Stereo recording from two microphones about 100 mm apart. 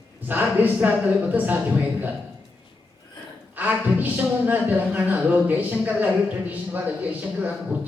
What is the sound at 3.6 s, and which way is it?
A man's voice, 15° right (ahead or behind).